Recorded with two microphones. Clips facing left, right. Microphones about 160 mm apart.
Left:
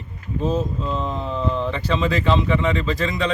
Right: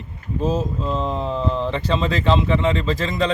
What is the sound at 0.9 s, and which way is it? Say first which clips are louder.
Speech: right 2 dB; 30° right (ahead or behind).